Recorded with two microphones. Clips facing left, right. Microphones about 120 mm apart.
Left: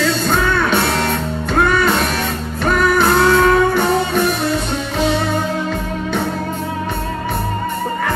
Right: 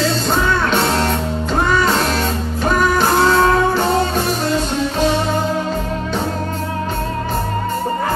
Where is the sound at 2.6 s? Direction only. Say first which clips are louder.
Left 1 dB; 60° left (ahead or behind).